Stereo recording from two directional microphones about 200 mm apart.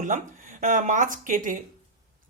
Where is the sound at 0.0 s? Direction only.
40° right (ahead or behind).